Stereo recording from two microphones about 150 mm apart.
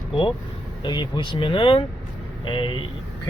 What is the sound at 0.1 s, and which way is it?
Speech, 35° left (ahead or behind).